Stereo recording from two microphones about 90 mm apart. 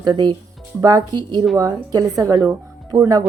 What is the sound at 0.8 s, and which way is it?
Speech, 45° right (ahead or behind).